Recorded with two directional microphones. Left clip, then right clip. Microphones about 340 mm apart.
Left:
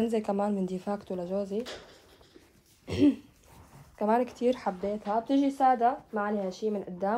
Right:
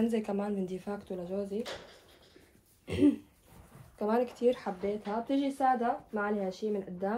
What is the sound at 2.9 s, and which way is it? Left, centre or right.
Throat clearing, left.